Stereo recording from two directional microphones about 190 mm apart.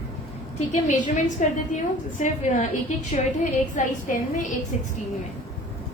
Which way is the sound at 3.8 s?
45° left (ahead or behind).